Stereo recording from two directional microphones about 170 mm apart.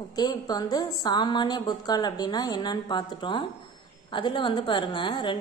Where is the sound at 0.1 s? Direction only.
25° left (ahead or behind).